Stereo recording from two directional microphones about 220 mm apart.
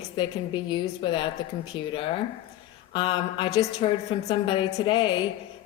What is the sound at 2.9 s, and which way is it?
Speech, 25° left (ahead or behind).